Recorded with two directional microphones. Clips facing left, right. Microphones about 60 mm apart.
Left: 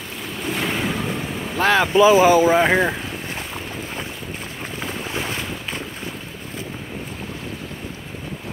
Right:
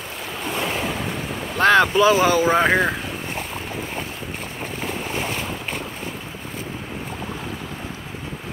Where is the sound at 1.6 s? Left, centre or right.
Centre.